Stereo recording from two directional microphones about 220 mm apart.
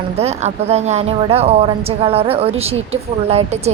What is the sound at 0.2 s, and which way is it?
Speech, 30° right (ahead or behind).